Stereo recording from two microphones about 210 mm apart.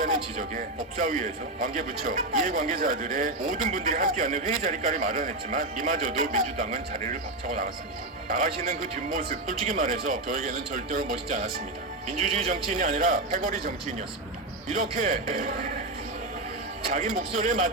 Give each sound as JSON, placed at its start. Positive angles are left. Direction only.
{"t": 0.0, "sound": "a man's voice", "side_deg": -40}
{"t": 17.2, "sound": "a man's voice", "side_deg": -40}